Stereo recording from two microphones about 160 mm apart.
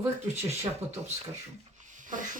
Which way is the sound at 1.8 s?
50° right (ahead or behind).